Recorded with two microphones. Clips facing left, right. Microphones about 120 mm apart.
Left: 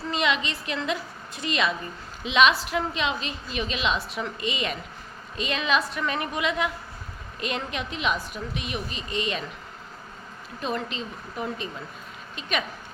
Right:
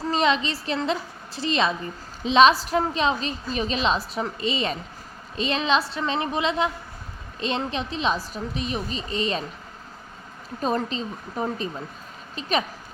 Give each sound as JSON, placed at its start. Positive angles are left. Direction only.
{"t": 0.1, "sound": "a woman's voice", "side_deg": -35}
{"t": 10.6, "sound": "a woman's voice", "side_deg": -35}